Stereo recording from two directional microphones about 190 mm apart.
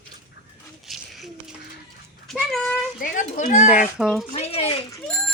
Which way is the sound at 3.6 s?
5° right (ahead or behind).